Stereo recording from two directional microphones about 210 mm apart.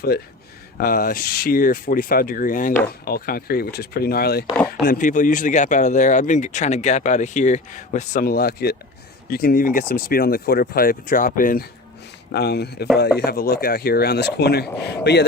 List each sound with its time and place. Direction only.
0.1 s speech: 50° left (ahead or behind)
12.3 s speech: 50° left (ahead or behind)